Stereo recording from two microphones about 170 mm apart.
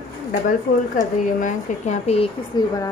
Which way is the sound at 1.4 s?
45° left (ahead or behind).